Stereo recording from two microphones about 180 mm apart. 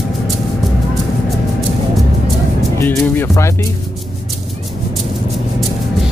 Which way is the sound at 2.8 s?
10° left (ahead or behind).